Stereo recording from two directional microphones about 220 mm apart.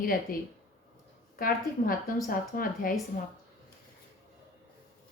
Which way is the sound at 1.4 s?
40° left (ahead or behind).